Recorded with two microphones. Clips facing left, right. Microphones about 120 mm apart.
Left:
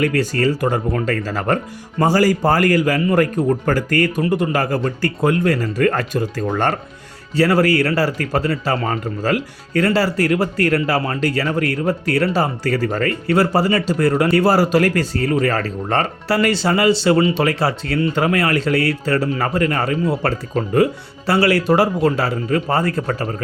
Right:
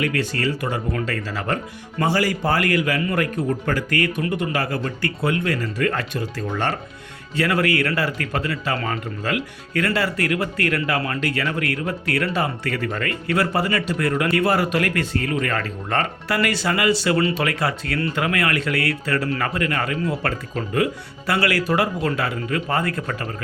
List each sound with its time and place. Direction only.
0.0 s speech: 40° left (ahead or behind)
7.3 s speech: 35° left (ahead or behind)